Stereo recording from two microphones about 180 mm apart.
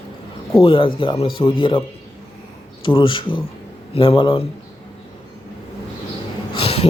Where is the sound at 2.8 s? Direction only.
30° left (ahead or behind).